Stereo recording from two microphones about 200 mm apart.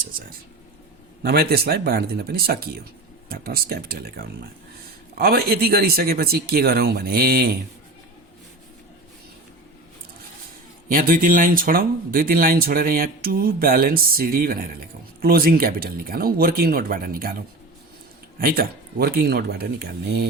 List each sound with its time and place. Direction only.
1.2 s speech: 50° right (ahead or behind)
10.8 s speech: 45° right (ahead or behind)
18.3 s speech: 45° right (ahead or behind)